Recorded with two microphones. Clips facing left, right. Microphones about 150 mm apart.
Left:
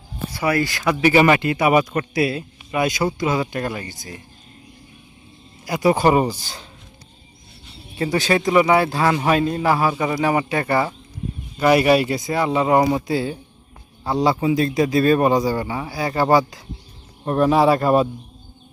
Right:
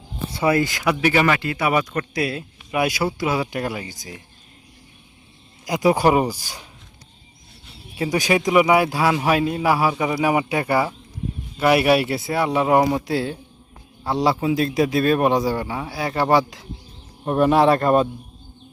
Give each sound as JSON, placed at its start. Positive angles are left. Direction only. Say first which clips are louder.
{"t": 0.3, "sound": "speech", "louder": "right 1 dB", "side_deg": -20}
{"t": 1.0, "sound": "speech", "louder": "left 4 dB", "side_deg": 10}
{"t": 1.3, "sound": "speech", "louder": "left 4 dB", "side_deg": 20}
{"t": 2.7, "sound": "a man's voice", "louder": "left 1 dB", "side_deg": -10}
{"t": 5.6, "sound": "a man's voice", "louder": "even", "side_deg": -15}
{"t": 7.9, "sound": "a man's voice", "louder": "left 1 dB", "side_deg": -10}